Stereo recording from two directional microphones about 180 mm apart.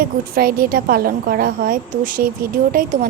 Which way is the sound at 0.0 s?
55° right (ahead or behind).